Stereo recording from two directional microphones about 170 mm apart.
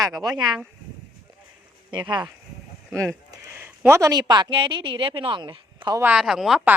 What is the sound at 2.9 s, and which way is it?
Speech, 5° left (ahead or behind).